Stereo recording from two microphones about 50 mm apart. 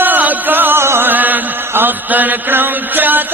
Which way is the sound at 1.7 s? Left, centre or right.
Right.